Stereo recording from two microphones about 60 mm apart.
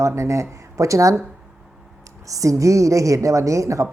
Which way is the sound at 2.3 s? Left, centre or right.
Right.